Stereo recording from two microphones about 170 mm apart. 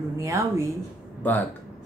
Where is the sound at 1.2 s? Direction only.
10° left (ahead or behind).